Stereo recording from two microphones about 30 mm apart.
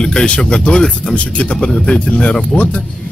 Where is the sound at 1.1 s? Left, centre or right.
Left.